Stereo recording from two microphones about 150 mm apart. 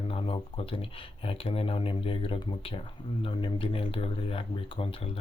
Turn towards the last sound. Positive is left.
turn(degrees=40)  # may be behind; listen again after turning